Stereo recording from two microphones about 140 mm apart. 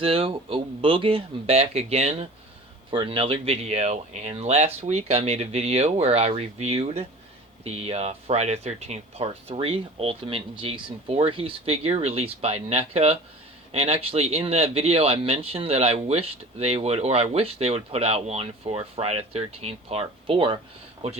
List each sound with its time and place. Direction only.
0.0 s speech: 40° right (ahead or behind)